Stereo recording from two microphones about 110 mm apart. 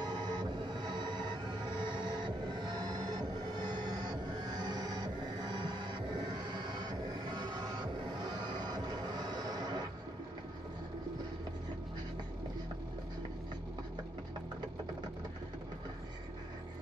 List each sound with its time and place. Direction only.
0.0 s music: 40° right (ahead or behind)